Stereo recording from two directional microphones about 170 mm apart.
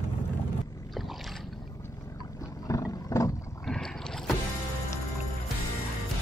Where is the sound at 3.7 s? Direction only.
5° left (ahead or behind).